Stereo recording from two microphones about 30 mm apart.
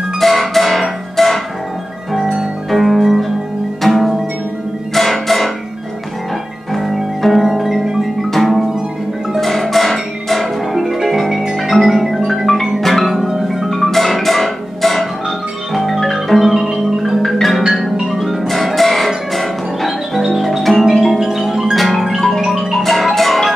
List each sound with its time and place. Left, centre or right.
0.2 s music: centre
2.7 s music: centre
6.7 s music: centre
12.8 s marimba: centre
13.5 s music: centre
16.6 s music: centre
17.3 s music: centre
21.7 s music: centre
22.4 s music: centre
22.8 s music: centre